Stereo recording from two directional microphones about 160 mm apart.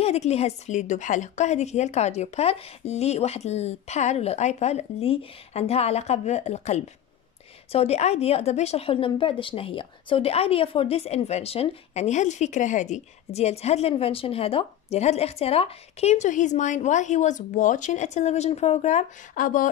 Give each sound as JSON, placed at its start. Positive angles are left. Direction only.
{"t": 0.0, "sound": "a woman's voice", "side_deg": 40}